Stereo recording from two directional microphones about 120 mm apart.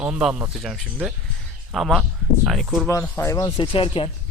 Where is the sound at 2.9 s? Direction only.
25° left (ahead or behind).